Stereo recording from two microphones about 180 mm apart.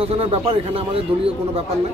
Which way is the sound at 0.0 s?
30° right (ahead or behind).